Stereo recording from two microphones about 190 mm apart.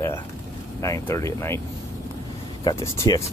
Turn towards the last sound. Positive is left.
turn(degrees=15)  # may be behind; listen again after turning